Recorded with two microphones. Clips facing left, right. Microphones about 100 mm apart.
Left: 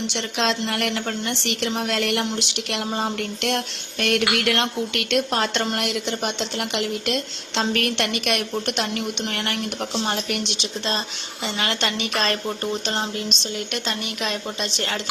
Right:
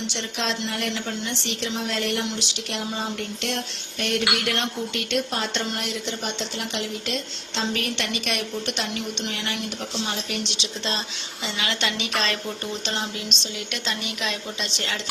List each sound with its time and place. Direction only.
0.1 s a woman's voice: 70° left (ahead or behind); by 12.4 s 45° left (ahead or behind)
13.4 s a woman's voice: 45° left (ahead or behind)